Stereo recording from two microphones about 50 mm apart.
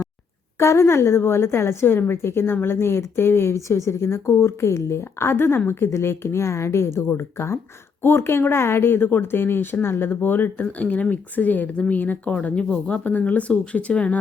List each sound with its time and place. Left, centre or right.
0.6 s a woman's voice: left
10.7 s speech: left